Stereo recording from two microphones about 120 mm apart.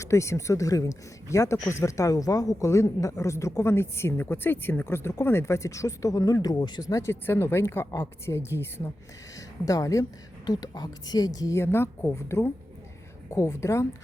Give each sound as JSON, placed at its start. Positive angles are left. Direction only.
{"t": 0.0, "sound": "a woman's voice", "side_deg": 25}